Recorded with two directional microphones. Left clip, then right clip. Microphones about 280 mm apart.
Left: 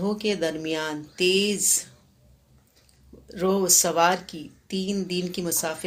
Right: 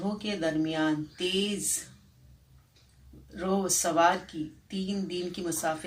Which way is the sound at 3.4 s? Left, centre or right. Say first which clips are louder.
Left 7 dB; left.